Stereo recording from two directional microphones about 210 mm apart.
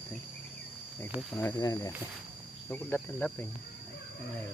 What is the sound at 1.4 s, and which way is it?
Cricket, 15° left (ahead or behind).